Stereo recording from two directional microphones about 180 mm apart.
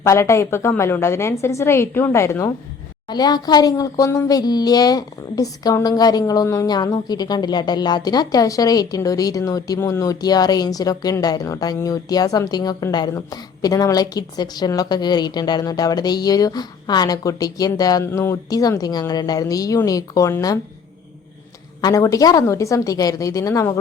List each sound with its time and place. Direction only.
0.0 s a woman's voice: 15° left (ahead or behind)
21.8 s a woman's voice: 20° left (ahead or behind)